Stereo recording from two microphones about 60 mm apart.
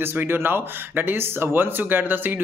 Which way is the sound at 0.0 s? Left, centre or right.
Right.